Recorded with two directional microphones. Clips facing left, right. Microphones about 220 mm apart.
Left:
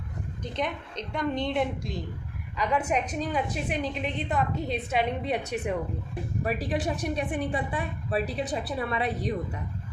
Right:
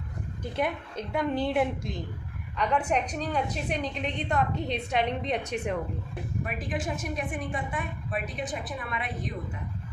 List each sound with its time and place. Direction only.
0.5 s a woman's voice: 5° right (ahead or behind)
6.4 s a woman's voice: 35° left (ahead or behind)